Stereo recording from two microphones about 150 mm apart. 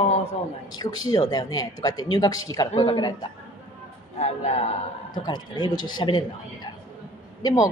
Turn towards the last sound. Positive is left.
turn(degrees=25)  # may be behind; listen again after turning